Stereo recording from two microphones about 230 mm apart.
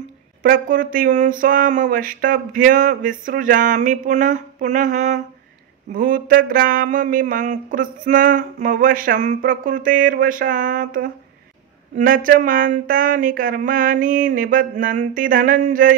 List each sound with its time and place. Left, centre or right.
0.4 s speech: right